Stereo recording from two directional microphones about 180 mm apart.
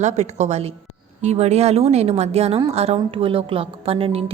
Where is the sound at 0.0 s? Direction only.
40° right (ahead or behind).